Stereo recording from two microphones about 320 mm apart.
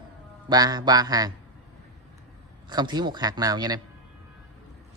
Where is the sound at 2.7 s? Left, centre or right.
Centre.